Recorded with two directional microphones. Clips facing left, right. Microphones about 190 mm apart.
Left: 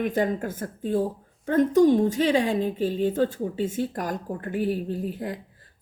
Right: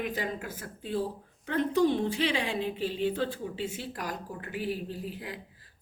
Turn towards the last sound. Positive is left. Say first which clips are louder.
# left 8 dB
turn(degrees=45)  # may be behind; listen again after turning